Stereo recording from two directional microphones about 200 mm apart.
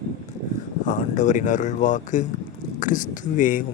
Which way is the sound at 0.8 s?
40° left (ahead or behind).